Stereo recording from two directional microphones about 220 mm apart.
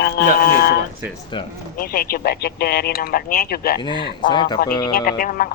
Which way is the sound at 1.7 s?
40° left (ahead or behind).